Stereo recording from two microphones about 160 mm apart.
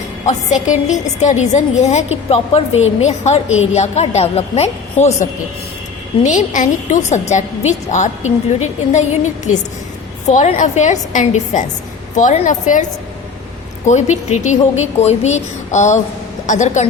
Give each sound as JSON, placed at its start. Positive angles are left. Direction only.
{"t": 0.3, "sound": "a woman's voice", "side_deg": 50}
{"t": 6.2, "sound": "a woman's voice", "side_deg": 50}
{"t": 10.2, "sound": "a woman's voice", "side_deg": 50}
{"t": 13.8, "sound": "a woman's voice", "side_deg": 45}